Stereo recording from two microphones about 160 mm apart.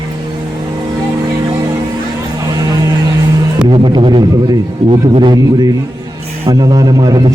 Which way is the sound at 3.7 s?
30° right (ahead or behind).